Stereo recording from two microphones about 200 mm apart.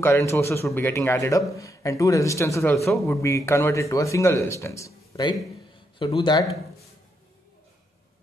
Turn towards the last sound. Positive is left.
turn(degrees=20)  # may be behind; listen again after turning